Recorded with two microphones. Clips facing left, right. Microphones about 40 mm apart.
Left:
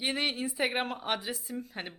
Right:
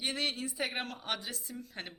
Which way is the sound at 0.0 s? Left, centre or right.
Centre.